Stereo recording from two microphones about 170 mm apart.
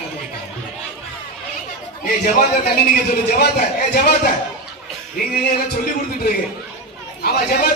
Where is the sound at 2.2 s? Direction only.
70° left (ahead or behind).